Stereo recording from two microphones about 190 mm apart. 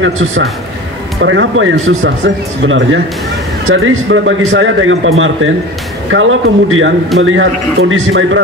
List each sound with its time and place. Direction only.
0.0 s a man's voice: 90° right
3.6 s a man's voice: 90° right